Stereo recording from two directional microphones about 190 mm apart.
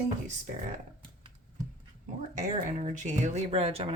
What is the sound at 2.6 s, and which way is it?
Speech, 40° right (ahead or behind).